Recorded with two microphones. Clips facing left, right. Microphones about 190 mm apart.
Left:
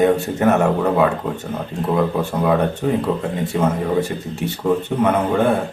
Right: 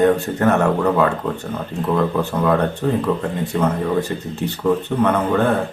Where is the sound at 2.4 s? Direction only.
10° left (ahead or behind).